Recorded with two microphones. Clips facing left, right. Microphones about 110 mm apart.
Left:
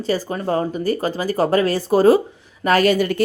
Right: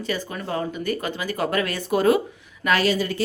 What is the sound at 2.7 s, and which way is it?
Speech, 50° left (ahead or behind).